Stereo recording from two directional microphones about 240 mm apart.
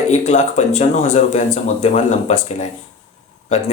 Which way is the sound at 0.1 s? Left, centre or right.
Left.